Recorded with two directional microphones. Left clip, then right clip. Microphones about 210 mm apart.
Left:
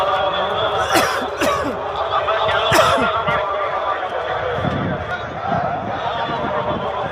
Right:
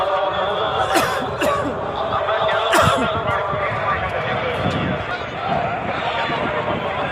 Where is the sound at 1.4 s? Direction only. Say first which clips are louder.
Left 1 dB; 55° left (ahead or behind).